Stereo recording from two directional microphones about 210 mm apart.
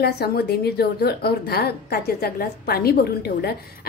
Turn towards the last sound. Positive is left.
turn(degrees=50)  # may be behind; listen again after turning